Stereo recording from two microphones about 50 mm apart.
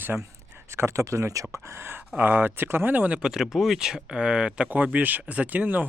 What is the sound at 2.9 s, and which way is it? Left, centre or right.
Speech, right.